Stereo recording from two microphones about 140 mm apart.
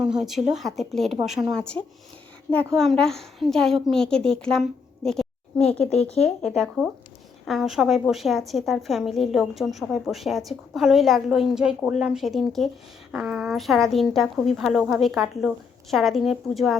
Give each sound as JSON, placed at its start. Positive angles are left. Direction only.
{"t": 0.0, "sound": "a woman's voice", "side_deg": -5}
{"t": 5.0, "sound": "a sound", "side_deg": 5}
{"t": 5.8, "sound": "speech", "side_deg": 50}
{"t": 6.2, "sound": "a woman's voice", "side_deg": 5}